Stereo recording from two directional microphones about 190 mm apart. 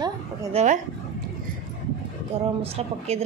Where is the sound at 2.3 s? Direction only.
30° right (ahead or behind).